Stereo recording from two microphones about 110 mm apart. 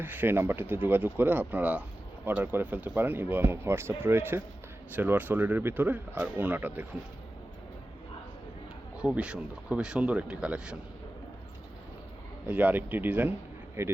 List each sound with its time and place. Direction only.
0.0 s speech: 20° right (ahead or behind)
9.0 s speech: 10° right (ahead or behind)
12.5 s speech: 15° right (ahead or behind)